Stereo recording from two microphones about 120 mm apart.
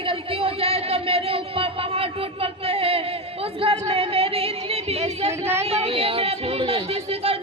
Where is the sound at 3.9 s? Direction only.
55° right (ahead or behind).